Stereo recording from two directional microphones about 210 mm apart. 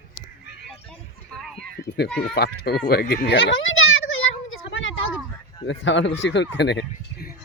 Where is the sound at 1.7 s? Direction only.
50° left (ahead or behind).